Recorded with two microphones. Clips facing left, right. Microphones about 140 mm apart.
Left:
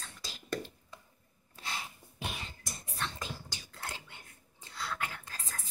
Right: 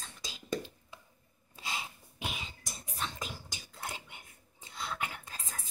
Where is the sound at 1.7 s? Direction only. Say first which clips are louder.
Right 1 dB; 15° right (ahead or behind).